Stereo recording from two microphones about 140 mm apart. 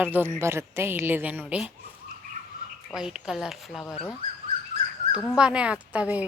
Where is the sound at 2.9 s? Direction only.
5° right (ahead or behind).